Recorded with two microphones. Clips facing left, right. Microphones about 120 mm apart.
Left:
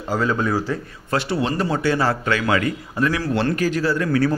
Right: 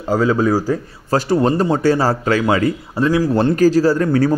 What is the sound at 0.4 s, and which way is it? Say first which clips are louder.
Speech: right 6 dB; 40° right (ahead or behind).